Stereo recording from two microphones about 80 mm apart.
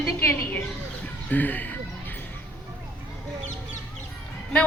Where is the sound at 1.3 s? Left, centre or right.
Left.